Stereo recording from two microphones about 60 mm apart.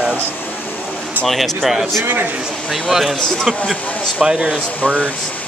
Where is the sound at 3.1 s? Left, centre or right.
Centre.